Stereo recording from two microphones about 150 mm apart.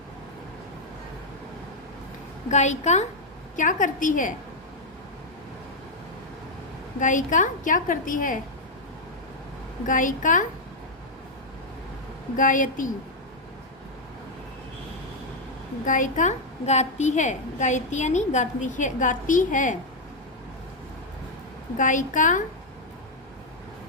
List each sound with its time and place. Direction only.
2.5 s a woman's voice: 50° left (ahead or behind)
7.0 s a woman's voice: 55° left (ahead or behind)
9.8 s a woman's voice: 60° left (ahead or behind)
12.4 s a woman's voice: 60° left (ahead or behind)
15.9 s a woman's voice: 60° left (ahead or behind)
21.8 s a woman's voice: 60° left (ahead or behind)